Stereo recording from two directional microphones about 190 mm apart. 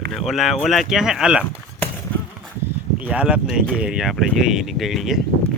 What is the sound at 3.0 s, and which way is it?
Speech, 5° right (ahead or behind).